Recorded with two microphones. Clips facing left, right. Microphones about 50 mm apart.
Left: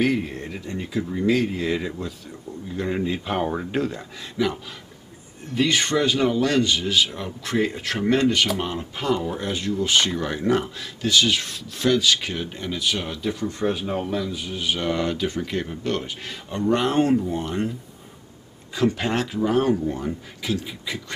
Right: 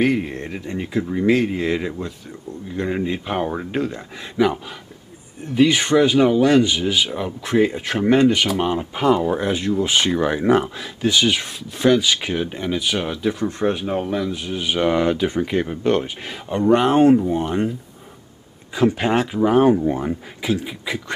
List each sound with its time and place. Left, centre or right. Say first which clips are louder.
0.0 s speech: right 3 dB; right
4.4 s speech: right 6 dB; right
5.5 s speech: right 5 dB; centre
18.8 s speech: right 4 dB; centre